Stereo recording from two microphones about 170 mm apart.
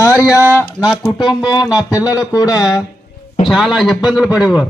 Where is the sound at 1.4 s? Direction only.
25° left (ahead or behind).